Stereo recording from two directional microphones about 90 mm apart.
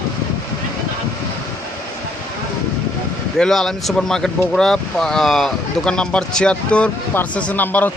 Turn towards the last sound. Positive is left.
turn(degrees=20)  # may be behind; listen again after turning